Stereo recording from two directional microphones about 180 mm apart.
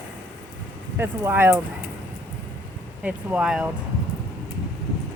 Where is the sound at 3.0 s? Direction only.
5° right (ahead or behind).